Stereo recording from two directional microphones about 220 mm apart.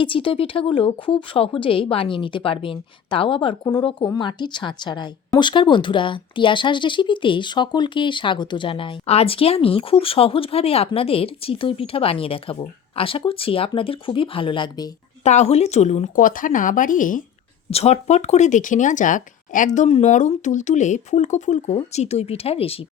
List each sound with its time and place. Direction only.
0.0 s a woman's voice: 25° left (ahead or behind)